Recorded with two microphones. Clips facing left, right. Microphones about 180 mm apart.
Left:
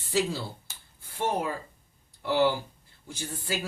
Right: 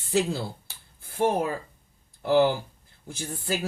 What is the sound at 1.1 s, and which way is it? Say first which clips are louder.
Speech: right 5 dB; 40° right (ahead or behind).